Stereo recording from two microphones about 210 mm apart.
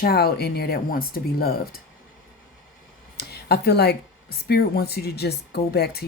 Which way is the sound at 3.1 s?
50° left (ahead or behind).